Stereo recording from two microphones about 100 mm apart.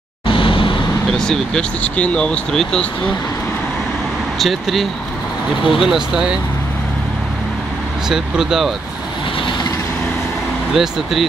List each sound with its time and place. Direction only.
0.3 s vehicle: 60° left (ahead or behind)
1.1 s speech: 5° left (ahead or behind)
4.4 s speech: centre (ahead or behind)
8.1 s speech: 5° right (ahead or behind)
10.7 s speech: centre (ahead or behind)